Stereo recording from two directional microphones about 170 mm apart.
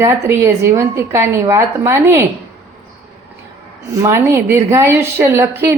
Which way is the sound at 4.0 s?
15° right (ahead or behind).